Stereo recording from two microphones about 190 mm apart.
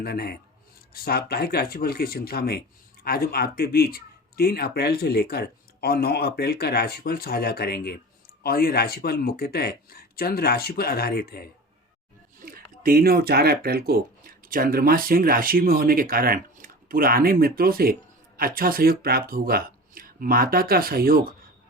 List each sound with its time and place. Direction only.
0.0 s speech: 55° left (ahead or behind)
12.4 s speech: 50° right (ahead or behind)